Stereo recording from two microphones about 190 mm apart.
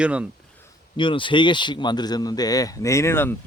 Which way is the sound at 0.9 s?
25° left (ahead or behind).